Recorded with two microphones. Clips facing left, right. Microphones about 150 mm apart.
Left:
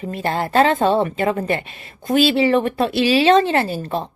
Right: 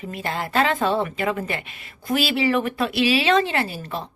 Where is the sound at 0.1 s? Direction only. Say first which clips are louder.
Left 6 dB; 35° left (ahead or behind).